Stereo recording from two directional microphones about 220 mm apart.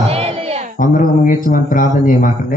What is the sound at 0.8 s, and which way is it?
A man's voice, 35° left (ahead or behind).